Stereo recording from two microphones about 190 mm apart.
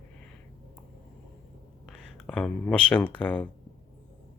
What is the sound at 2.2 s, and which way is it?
Speech, 5° left (ahead or behind).